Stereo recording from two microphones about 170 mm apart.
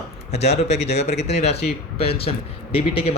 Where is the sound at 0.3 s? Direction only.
40° left (ahead or behind).